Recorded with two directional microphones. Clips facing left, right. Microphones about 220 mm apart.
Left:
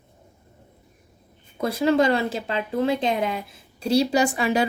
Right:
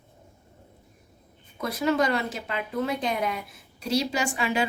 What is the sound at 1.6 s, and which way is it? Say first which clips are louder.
A woman's voice: left 5 dB; 30° left (ahead or behind).